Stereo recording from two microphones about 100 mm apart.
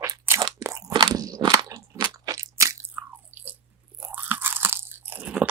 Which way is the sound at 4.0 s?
20° right (ahead or behind).